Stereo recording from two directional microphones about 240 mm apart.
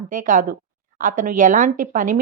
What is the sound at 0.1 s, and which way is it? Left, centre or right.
Speech, right.